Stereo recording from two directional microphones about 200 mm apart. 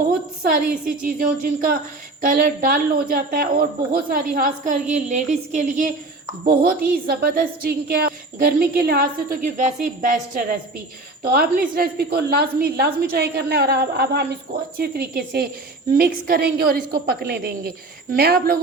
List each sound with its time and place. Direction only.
0.9 s a woman's voice: 45° right (ahead or behind)